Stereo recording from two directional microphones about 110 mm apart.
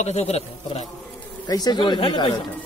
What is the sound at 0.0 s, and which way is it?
Speech, 80° left.